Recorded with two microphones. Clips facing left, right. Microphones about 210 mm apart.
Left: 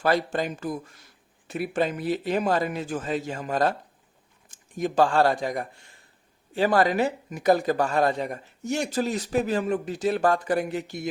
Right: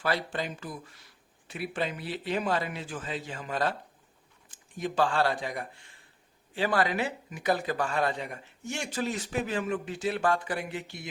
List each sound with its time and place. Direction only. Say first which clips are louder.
0.0 s speech: left 7 dB; 45° left (ahead or behind)